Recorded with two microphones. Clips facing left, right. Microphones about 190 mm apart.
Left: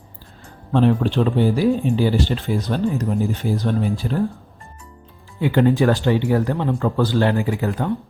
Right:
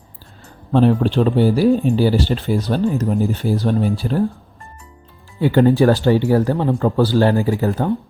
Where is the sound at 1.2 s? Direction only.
35° right (ahead or behind).